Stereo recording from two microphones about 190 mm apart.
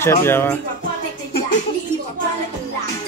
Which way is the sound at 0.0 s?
15° left (ahead or behind).